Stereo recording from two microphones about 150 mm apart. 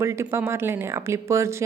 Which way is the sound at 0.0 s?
20° right (ahead or behind).